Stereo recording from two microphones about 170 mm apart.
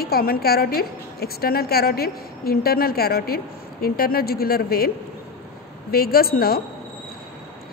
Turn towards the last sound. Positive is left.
turn(degrees=60)  # may be behind; listen again after turning